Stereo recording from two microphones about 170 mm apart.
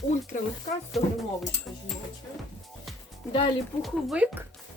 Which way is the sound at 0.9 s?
Centre (ahead or behind).